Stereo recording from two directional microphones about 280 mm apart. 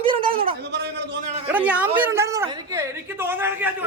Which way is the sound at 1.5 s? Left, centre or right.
Centre.